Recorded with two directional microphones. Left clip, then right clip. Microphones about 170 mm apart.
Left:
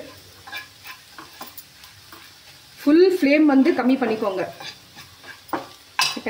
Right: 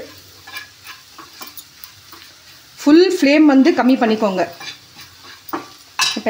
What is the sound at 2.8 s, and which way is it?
Speech, 65° right (ahead or behind).